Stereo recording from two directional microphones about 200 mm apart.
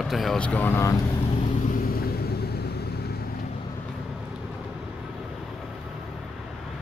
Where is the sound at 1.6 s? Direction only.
50° left (ahead or behind).